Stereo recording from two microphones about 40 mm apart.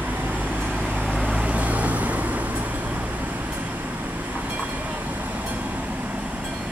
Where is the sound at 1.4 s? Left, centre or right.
Right.